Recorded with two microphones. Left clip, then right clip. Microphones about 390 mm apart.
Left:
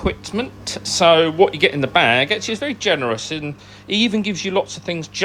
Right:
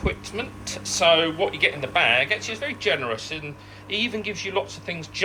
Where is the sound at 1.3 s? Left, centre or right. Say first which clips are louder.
Left 7 dB; left.